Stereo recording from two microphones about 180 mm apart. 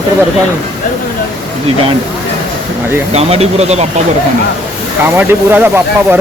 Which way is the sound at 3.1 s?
35° right (ahead or behind).